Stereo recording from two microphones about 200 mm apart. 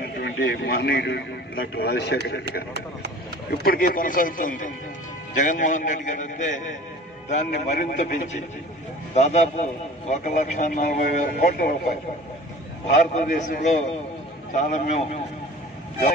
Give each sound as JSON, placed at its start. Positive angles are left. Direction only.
{"t": 0.0, "sound": "a man's voice", "side_deg": 55}
{"t": 3.4, "sound": "a man's voice", "side_deg": 45}
{"t": 13.1, "sound": "a man's voice", "side_deg": 40}